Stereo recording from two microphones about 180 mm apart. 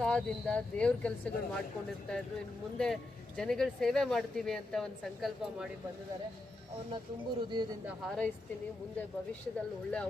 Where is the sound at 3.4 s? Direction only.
Centre (ahead or behind).